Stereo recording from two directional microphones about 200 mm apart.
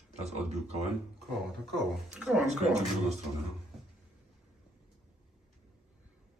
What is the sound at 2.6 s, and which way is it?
Speech, 35° right (ahead or behind).